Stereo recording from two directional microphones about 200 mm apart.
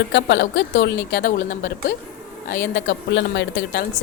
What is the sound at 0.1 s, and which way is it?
Speech, 65° left (ahead or behind).